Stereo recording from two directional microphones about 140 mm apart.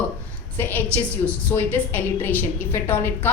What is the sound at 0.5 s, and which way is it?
A woman's voice, 15° left (ahead or behind).